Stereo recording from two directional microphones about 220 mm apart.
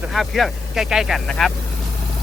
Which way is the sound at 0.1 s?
Centre (ahead or behind).